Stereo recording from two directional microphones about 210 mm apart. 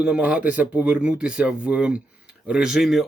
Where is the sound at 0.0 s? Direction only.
5° right (ahead or behind).